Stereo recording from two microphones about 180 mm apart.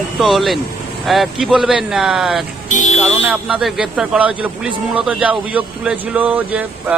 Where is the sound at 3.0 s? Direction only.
5° right (ahead or behind).